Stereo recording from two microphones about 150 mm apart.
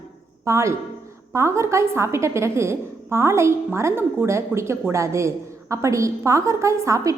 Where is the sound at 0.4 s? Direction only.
20° right (ahead or behind).